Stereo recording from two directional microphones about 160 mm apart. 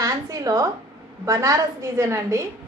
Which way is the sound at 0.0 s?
20° right (ahead or behind).